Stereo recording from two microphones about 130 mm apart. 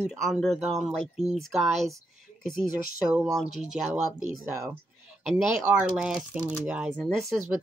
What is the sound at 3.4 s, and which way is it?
Speech, 65° right (ahead or behind).